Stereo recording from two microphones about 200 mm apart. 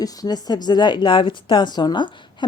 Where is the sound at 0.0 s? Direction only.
20° left (ahead or behind).